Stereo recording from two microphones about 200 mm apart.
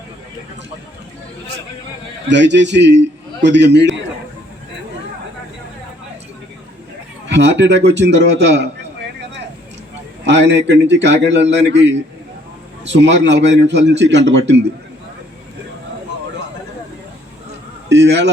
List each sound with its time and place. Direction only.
2.3 s a man's voice: 60° right (ahead or behind)
7.3 s a man's voice: 60° right (ahead or behind)
10.2 s a man's voice: 60° right (ahead or behind)
17.8 s a man's voice: 60° right (ahead or behind)